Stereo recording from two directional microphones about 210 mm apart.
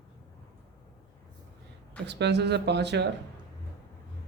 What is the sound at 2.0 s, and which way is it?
Speech, 55° right (ahead or behind).